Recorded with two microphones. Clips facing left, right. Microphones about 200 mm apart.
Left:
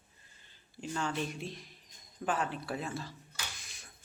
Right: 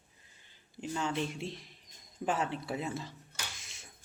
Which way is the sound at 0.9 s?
20° right (ahead or behind).